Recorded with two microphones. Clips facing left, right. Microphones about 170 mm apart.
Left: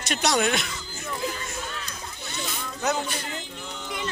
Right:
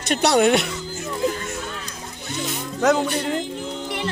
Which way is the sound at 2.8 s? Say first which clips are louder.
Right 9 dB; 85° right.